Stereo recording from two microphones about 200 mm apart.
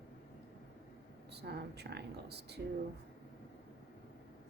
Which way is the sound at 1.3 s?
55° right (ahead or behind).